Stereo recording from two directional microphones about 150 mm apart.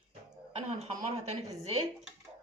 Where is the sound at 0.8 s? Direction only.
45° right (ahead or behind).